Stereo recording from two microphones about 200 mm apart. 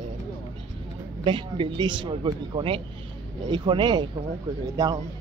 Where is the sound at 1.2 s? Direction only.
25° right (ahead or behind).